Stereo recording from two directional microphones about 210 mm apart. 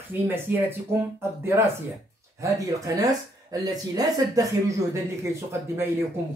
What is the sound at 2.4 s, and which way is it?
Speech, 15° right (ahead or behind).